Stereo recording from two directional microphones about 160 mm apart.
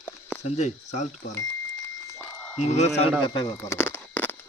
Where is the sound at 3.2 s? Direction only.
30° left (ahead or behind).